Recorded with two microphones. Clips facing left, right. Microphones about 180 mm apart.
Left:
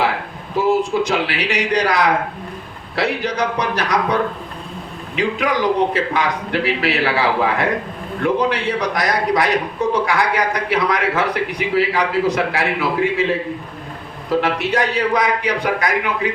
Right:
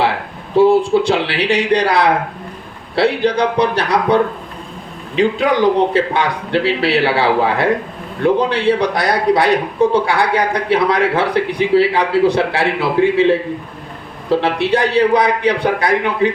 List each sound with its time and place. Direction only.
0.5 s a man's voice: 30° right (ahead or behind)
14.3 s a man's voice: 30° right (ahead or behind)